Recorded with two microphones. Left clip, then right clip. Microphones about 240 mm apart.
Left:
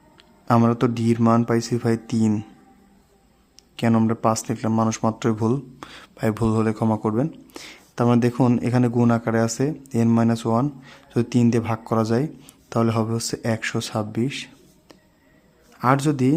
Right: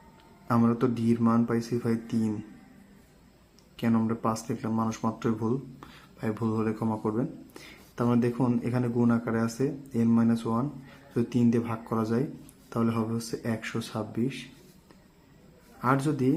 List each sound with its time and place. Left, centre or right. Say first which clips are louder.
0.4 s speech: left 7 dB; left
3.8 s speech: left 7 dB; left
15.8 s speech: left 7 dB; left